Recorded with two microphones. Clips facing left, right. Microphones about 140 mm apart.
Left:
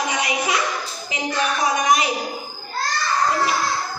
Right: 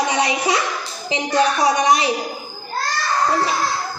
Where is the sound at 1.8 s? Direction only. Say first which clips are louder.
Right 2 dB; 30° right (ahead or behind).